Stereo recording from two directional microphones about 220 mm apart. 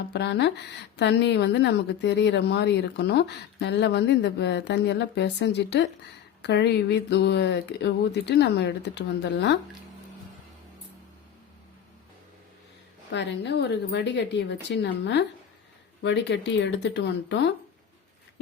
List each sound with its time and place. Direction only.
0.1 s a woman's voice: 50° left (ahead or behind)
13.1 s a woman's voice: 50° left (ahead or behind)